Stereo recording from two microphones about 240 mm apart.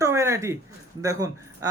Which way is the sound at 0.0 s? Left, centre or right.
Centre.